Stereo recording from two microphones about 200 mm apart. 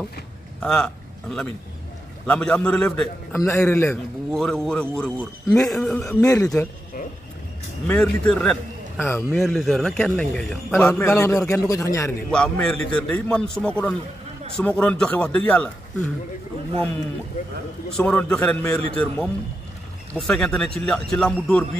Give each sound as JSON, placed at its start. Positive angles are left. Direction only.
{"t": 0.6, "sound": "a man's voice", "side_deg": 5}
{"t": 7.8, "sound": "a man's voice", "side_deg": 5}
{"t": 12.3, "sound": "a man's voice", "side_deg": 5}
{"t": 17.9, "sound": "a man's voice", "side_deg": 5}